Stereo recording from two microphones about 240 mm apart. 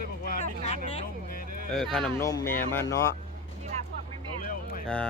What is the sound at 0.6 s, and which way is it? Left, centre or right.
Speech, left.